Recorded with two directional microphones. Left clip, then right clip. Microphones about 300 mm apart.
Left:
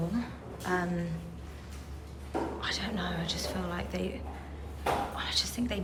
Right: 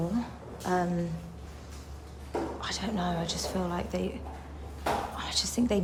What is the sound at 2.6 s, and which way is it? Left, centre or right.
A woman's voice, centre.